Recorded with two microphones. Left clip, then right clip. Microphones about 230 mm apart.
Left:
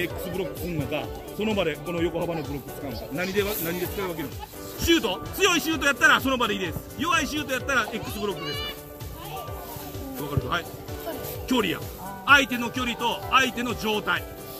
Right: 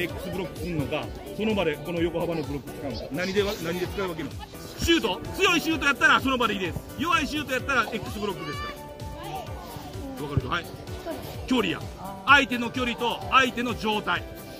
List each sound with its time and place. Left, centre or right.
0.9 s speech: centre
3.7 s speech: right
4.7 s speech: centre
10.5 s speech: centre